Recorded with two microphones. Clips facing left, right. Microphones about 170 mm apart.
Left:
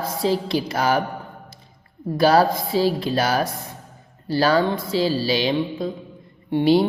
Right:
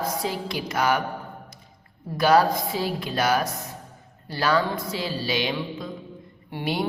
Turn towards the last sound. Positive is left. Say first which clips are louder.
# left 12 dB
turn(degrees=25)  # may be behind; listen again after turning